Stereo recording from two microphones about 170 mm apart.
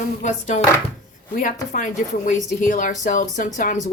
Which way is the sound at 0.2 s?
45° left (ahead or behind).